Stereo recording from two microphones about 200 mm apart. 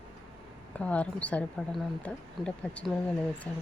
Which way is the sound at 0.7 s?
5° left (ahead or behind).